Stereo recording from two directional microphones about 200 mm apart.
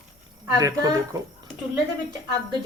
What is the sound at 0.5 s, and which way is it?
Speech, 15° right (ahead or behind).